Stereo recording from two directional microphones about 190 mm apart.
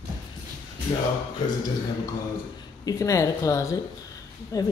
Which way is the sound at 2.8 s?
15° left (ahead or behind).